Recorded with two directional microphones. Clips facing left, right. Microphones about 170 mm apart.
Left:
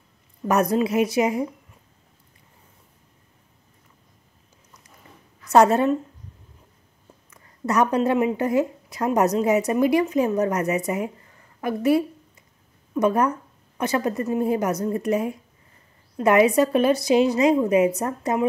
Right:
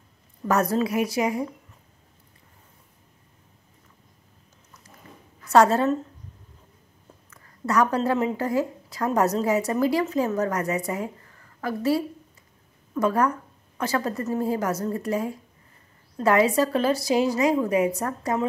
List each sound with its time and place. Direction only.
0.5 s speech: 20° left (ahead or behind)
5.5 s speech: 20° left (ahead or behind)
7.2 s speech: 20° left (ahead or behind)